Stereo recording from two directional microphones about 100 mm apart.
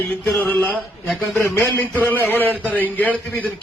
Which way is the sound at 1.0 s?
Centre (ahead or behind).